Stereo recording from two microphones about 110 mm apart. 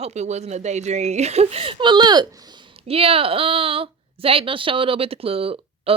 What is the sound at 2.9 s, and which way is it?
Speech, 60° right (ahead or behind).